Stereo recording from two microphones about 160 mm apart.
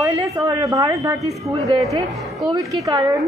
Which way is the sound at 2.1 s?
Centre (ahead or behind).